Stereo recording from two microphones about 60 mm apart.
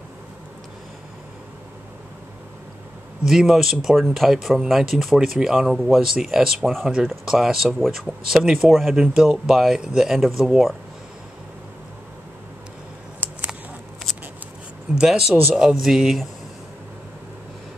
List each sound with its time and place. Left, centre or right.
3.3 s speech: centre
9.0 s speech: centre
13.2 s a sound: right
15.0 s speech: centre